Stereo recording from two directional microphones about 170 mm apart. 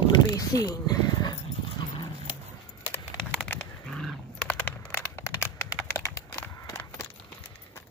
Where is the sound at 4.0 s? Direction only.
5° left (ahead or behind).